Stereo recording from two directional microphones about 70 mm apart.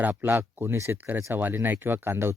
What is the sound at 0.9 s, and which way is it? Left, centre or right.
Speech, right.